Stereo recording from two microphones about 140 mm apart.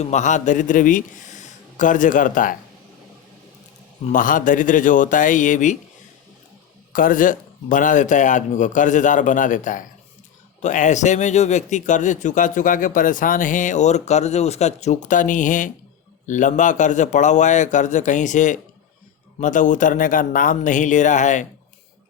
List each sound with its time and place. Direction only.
0.0 s a man's voice: 60° left (ahead or behind)
4.1 s speech: 70° left (ahead or behind)
6.9 s speech: 80° left; by 21.4 s 60° left (ahead or behind)